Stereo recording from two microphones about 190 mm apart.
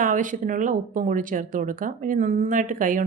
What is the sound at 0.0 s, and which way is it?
A woman's voice, 45° right (ahead or behind).